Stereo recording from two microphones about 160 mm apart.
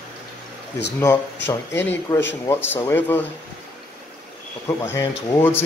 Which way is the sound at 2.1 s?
15° left (ahead or behind).